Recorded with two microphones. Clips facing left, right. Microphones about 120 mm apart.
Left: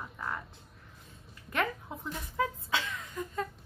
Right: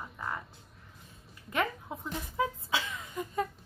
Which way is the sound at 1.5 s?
5° right (ahead or behind).